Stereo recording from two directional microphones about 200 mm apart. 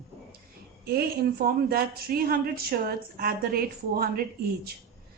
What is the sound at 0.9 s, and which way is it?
A woman's voice, 50° right (ahead or behind).